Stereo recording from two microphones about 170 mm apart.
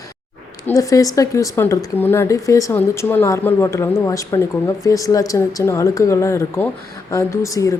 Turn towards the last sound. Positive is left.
turn(degrees=20)  # may be behind; listen again after turning